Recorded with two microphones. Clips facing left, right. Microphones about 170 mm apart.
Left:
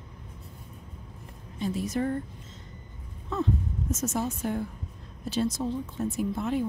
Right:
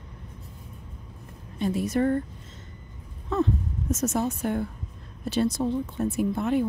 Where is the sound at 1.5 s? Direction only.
60° right (ahead or behind).